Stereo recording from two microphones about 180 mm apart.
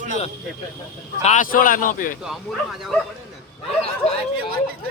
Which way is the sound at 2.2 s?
Centre (ahead or behind).